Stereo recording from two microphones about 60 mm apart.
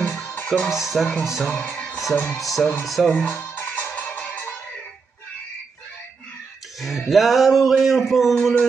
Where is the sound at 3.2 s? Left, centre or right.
Left.